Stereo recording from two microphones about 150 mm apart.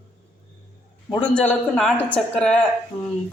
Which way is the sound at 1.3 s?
10° left (ahead or behind).